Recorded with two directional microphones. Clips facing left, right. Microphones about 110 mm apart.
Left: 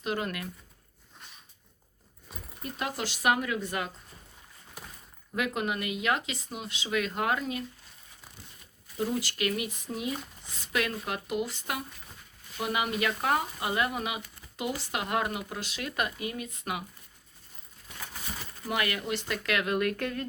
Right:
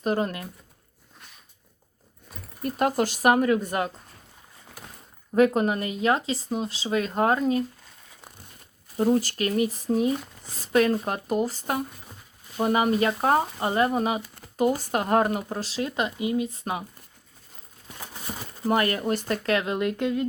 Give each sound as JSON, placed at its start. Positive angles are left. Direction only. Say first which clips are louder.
{"t": 0.0, "sound": "speech", "louder": "right 7 dB", "side_deg": -35}
{"t": 2.6, "sound": "speech", "louder": "right 11 dB", "side_deg": -45}
{"t": 5.3, "sound": "speech", "louder": "right 10 dB", "side_deg": -40}
{"t": 9.0, "sound": "speech", "louder": "right 8 dB", "side_deg": -40}
{"t": 16.5, "sound": "speech", "louder": "right 4 dB", "side_deg": -35}
{"t": 18.0, "sound": "speech", "louder": "right 4 dB", "side_deg": -25}